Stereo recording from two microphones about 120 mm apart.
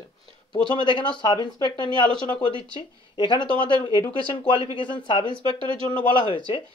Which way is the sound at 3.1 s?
40° left (ahead or behind).